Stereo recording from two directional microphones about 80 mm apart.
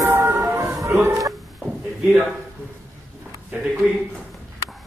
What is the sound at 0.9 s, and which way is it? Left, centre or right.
Chicken, right.